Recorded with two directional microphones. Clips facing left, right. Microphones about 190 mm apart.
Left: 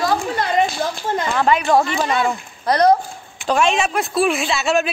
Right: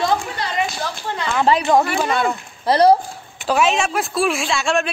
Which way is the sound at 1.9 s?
Centre (ahead or behind).